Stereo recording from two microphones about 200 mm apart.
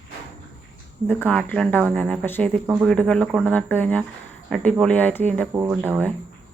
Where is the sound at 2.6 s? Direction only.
15° right (ahead or behind).